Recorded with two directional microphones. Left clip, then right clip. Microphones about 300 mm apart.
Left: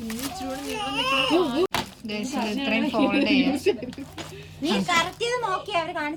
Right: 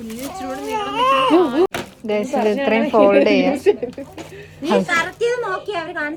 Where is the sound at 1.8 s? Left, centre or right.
Centre.